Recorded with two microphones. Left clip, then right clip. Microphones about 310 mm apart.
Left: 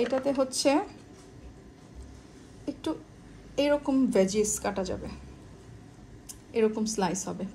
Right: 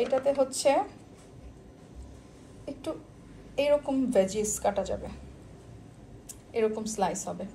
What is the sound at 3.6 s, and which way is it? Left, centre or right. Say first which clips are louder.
A woman's voice: even; left.